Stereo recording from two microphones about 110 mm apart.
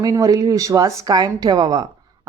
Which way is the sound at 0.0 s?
35° right (ahead or behind).